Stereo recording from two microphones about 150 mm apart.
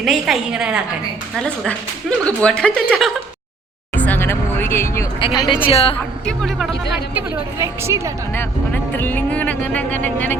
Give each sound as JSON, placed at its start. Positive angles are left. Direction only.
{"t": 0.0, "sound": "a woman's voice", "side_deg": 0}
{"t": 1.4, "sound": "speech", "side_deg": 5}
{"t": 3.9, "sound": "speech", "side_deg": 10}
{"t": 5.2, "sound": "speech", "side_deg": 30}
{"t": 6.2, "sound": "a woman's voice", "side_deg": 5}
{"t": 7.1, "sound": "a woman's voice", "side_deg": -15}
{"t": 8.3, "sound": "speech", "side_deg": 15}